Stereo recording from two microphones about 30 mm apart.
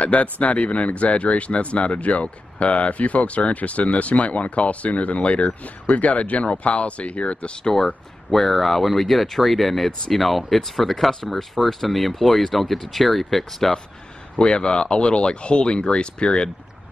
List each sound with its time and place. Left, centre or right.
0.0 s speech: left
5.6 s speech: left
7.6 s speech: left
8.3 s speech: centre
14.4 s speech: left